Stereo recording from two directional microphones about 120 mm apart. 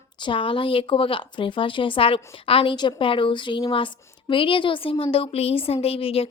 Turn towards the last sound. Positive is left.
turn(degrees=50)  # may be behind; listen again after turning